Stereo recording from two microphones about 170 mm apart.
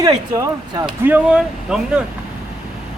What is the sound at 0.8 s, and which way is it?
Speech, 10° right (ahead or behind).